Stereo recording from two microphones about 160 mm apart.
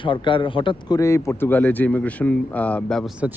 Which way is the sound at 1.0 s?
15° left (ahead or behind).